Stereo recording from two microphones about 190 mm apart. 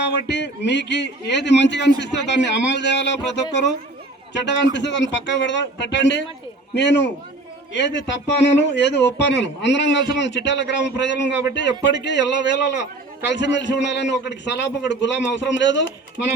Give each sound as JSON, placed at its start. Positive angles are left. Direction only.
{"t": 0.0, "sound": "a man's voice", "side_deg": 65}